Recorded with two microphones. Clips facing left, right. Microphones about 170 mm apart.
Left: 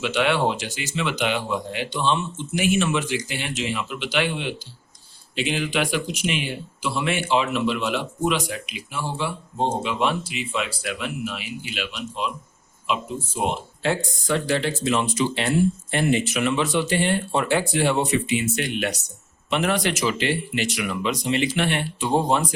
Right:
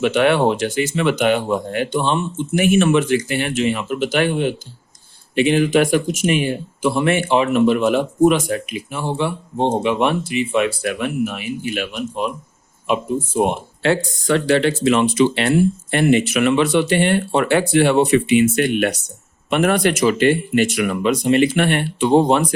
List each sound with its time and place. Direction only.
0.0 s speech: 55° right (ahead or behind)
13.3 s speech: 55° right (ahead or behind)